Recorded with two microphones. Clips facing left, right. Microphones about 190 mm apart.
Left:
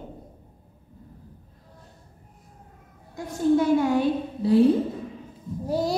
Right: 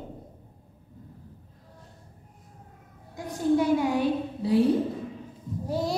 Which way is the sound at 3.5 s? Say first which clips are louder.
Left 2 dB; 15° right (ahead or behind).